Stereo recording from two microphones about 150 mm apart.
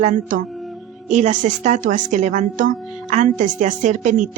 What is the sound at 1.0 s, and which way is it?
A woman's voice, 55° right (ahead or behind).